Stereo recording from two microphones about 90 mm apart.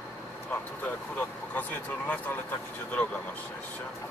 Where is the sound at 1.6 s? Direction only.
20° left (ahead or behind).